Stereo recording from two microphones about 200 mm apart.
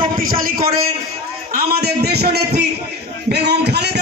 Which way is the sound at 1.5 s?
50° right (ahead or behind).